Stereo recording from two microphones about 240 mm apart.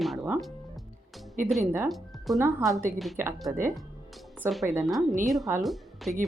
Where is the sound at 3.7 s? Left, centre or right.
Centre.